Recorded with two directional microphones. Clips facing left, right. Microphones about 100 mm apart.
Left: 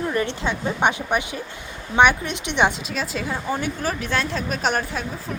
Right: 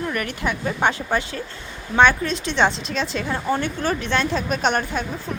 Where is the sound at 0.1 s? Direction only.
25° left (ahead or behind).